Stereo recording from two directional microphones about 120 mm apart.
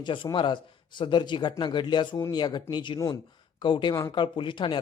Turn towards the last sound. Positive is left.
turn(degrees=40)  # may be behind; listen again after turning